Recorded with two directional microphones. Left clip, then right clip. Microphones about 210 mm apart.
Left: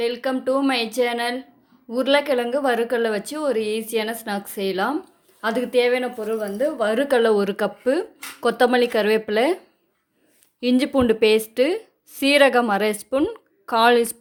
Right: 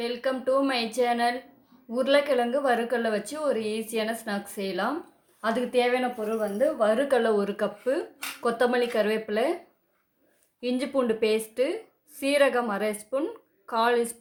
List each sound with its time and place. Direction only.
0.0 s speech: 35° left (ahead or behind)
10.6 s speech: 40° left (ahead or behind)